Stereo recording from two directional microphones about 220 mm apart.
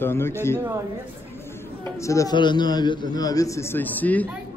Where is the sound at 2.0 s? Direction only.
15° left (ahead or behind).